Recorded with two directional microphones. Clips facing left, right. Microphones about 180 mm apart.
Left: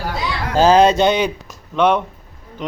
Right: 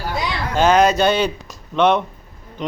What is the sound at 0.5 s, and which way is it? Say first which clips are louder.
A man's voice: left 3 dB; 30° left (ahead or behind).